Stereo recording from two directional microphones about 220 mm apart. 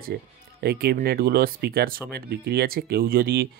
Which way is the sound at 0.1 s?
45° right (ahead or behind).